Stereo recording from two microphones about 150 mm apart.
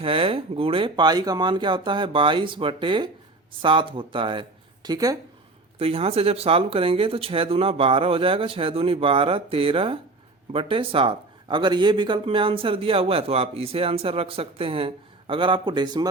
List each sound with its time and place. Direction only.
0.0 s speech: 40° right (ahead or behind)
5.8 s speech: 40° right (ahead or behind)